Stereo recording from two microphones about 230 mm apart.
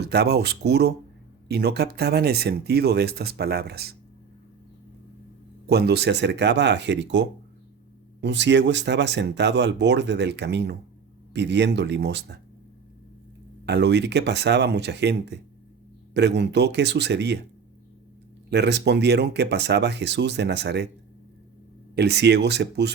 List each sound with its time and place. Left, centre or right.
0.0 s speech: right
5.6 s speech: right
13.7 s speech: right
18.5 s speech: right
21.9 s speech: right